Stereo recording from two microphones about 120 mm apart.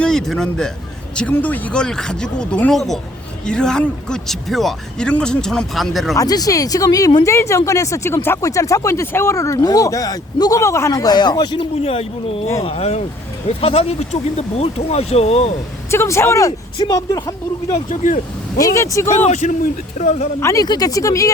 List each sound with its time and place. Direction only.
0.0 s speech: 5° left (ahead or behind)
6.1 s speech: 30° left (ahead or behind); by 15.4 s 60° left (ahead or behind)
15.9 s speech: 20° left (ahead or behind)
16.5 s speech: 40° left (ahead or behind)
17.7 s speech: 80° left
18.5 s speech: 25° left (ahead or behind)
19.0 s a man's voice: 70° left (ahead or behind)
20.4 s speech: 25° left (ahead or behind)